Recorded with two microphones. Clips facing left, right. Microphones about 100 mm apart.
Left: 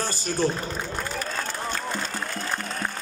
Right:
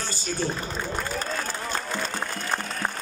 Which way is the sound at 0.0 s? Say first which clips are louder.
Left 4 dB; 45° left (ahead or behind).